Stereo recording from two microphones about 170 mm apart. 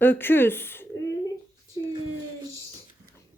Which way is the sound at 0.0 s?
10° left (ahead or behind).